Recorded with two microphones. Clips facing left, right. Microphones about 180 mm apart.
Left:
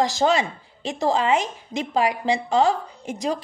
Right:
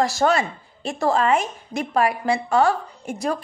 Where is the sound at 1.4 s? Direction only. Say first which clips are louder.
Right 1 dB; 90° left.